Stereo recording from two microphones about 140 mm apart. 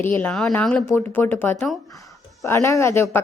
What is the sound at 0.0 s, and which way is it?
A woman's voice, 10° left (ahead or behind).